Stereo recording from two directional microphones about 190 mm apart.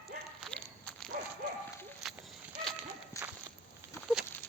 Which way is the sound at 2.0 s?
Centre (ahead or behind).